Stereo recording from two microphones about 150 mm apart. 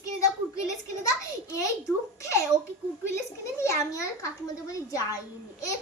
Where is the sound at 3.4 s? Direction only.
20° left (ahead or behind).